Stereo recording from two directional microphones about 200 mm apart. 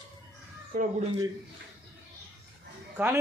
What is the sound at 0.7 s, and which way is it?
Speech, 45° right (ahead or behind).